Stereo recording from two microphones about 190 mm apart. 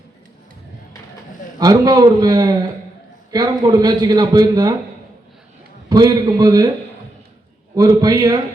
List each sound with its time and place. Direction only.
1.5 s a man's voice: 20° right (ahead or behind)
5.9 s a man's voice: 20° right (ahead or behind)
7.8 s a man's voice: 20° right (ahead or behind)